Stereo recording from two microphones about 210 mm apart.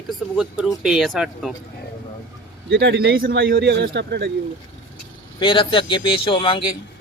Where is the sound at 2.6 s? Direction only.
50° right (ahead or behind).